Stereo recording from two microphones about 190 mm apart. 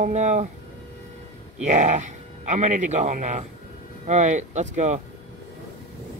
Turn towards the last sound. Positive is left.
turn(degrees=-40)  # may be behind; listen again after turning